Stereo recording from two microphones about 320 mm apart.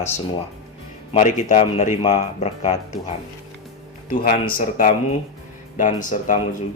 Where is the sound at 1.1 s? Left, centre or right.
Left.